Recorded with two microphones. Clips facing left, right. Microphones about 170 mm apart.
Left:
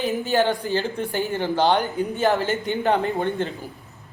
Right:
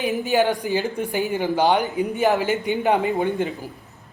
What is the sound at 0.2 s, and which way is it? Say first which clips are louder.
A man's voice: right 2 dB; 15° right (ahead or behind).